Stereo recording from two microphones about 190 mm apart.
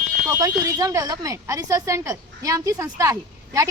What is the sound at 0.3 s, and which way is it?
Speech, 15° right (ahead or behind).